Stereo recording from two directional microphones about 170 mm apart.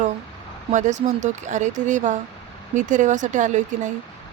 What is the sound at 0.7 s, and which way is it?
Speech, 45° right (ahead or behind).